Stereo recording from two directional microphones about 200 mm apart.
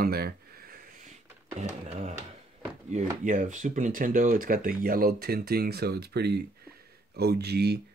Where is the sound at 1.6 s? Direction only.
35° right (ahead or behind).